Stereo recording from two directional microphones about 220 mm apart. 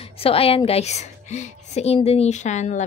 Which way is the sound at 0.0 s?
25° left (ahead or behind).